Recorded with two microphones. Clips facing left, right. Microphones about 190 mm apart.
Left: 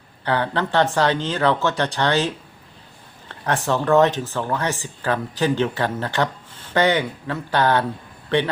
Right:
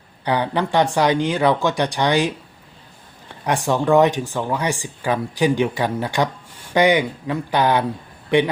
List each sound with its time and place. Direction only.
0.3 s speech: 15° right (ahead or behind)